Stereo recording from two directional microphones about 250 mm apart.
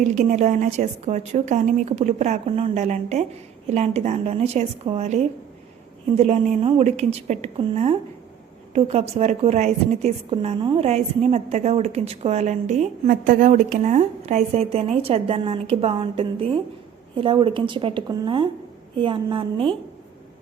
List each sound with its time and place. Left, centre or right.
0.1 s a woman's voice: right